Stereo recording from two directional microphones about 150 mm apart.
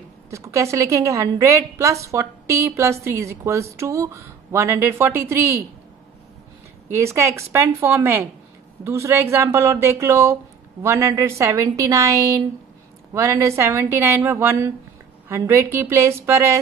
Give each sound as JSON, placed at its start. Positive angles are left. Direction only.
{"t": 0.3, "sound": "a woman's voice", "side_deg": -20}
{"t": 7.0, "sound": "a woman's voice", "side_deg": -20}